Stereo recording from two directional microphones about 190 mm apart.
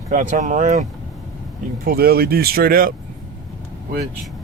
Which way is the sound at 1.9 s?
55° right (ahead or behind).